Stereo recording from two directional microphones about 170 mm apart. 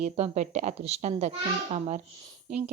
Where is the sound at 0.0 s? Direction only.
40° right (ahead or behind).